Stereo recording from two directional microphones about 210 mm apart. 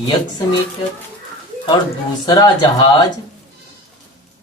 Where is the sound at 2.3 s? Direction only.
20° left (ahead or behind).